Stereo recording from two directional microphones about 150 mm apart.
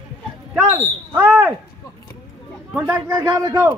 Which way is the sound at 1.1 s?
10° right (ahead or behind).